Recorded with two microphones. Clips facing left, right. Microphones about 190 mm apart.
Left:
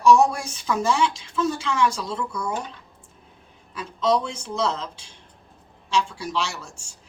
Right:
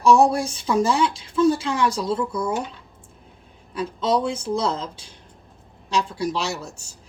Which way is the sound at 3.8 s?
35° right (ahead or behind).